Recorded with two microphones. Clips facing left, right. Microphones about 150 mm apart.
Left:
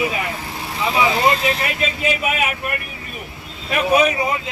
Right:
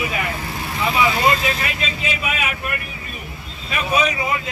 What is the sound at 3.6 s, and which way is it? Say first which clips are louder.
Speech: left 4 dB; 60° left (ahead or behind).